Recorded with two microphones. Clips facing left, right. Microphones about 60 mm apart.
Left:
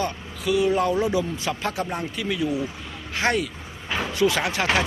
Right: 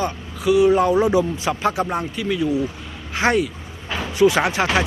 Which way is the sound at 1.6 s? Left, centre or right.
Centre.